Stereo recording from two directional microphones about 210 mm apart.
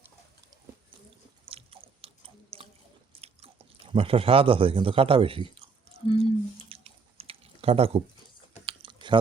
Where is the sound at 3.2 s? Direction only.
25° right (ahead or behind).